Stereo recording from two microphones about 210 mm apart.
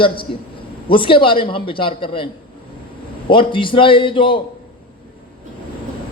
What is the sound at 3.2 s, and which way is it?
A man's voice, 25° left (ahead or behind).